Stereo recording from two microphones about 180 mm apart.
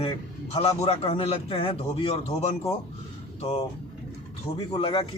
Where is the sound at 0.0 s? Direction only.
30° left (ahead or behind).